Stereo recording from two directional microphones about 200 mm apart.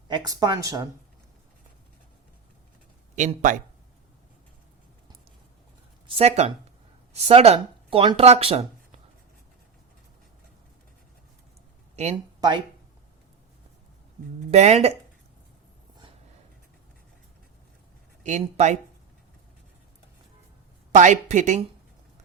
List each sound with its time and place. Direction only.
0.1 s speech: 20° right (ahead or behind)
3.2 s speech: 40° right (ahead or behind)
6.1 s speech: 30° right (ahead or behind)
11.9 s speech: 35° right (ahead or behind)
14.5 s speech: 35° right (ahead or behind)
18.2 s speech: 35° right (ahead or behind)
20.9 s speech: 40° right (ahead or behind)